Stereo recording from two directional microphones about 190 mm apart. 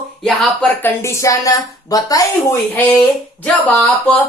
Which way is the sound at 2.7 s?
10° left (ahead or behind).